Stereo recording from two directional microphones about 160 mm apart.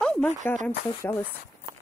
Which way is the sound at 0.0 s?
5° left (ahead or behind).